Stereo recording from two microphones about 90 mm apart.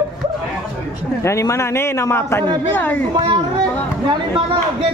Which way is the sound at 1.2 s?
35° left (ahead or behind).